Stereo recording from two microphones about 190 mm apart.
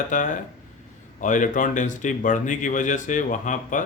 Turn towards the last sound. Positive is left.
turn(degrees=40)  # may be behind; listen again after turning